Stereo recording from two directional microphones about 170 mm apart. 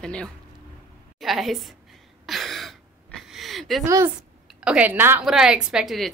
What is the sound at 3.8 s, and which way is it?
Speech, 15° right (ahead or behind).